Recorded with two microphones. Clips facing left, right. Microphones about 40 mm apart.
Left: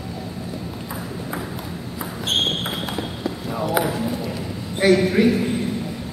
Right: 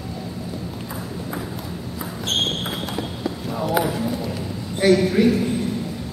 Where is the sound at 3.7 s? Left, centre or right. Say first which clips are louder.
Right 1 dB; centre.